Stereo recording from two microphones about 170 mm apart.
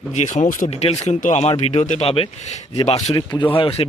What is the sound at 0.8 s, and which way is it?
Speech, 35° left (ahead or behind).